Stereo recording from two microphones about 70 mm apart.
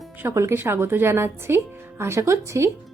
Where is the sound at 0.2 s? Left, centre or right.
Right.